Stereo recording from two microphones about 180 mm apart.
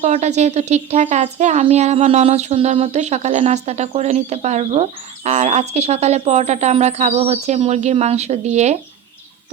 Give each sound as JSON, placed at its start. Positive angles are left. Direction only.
{"t": 0.0, "sound": "speech", "side_deg": -40}